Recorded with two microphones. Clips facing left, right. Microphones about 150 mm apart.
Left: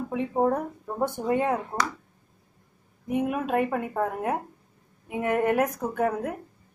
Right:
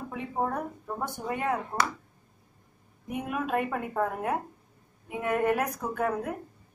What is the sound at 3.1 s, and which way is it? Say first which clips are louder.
A woman's voice: left 5 dB; 20° left (ahead or behind).